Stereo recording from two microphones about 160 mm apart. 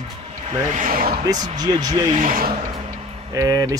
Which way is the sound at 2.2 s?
60° right (ahead or behind).